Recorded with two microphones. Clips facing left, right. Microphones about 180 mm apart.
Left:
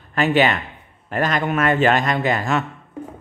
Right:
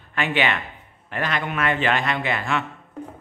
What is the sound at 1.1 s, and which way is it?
A man's voice, 45° left (ahead or behind).